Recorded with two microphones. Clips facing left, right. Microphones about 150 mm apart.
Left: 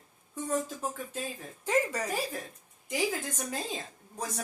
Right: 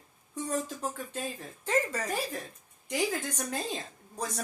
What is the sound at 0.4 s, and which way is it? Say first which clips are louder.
A woman's voice: left 1 dB; 5° left (ahead or behind).